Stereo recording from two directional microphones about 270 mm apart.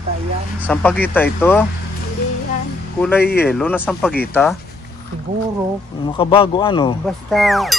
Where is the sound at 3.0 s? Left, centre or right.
Centre.